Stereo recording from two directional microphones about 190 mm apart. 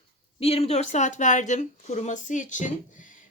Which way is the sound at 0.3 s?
30° left (ahead or behind).